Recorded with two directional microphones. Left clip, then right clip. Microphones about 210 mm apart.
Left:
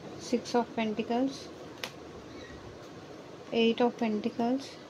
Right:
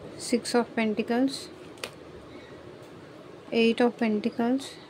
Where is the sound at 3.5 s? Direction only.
20° right (ahead or behind).